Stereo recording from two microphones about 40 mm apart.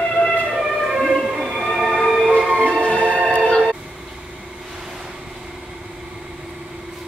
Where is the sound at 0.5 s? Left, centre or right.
Centre.